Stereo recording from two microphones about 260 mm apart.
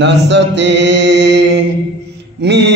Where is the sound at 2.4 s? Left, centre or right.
Right.